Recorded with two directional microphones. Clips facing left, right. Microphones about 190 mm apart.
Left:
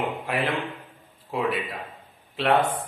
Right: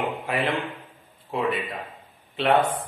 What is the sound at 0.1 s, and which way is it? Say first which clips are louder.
A man's voice: right 1 dB; centre (ahead or behind).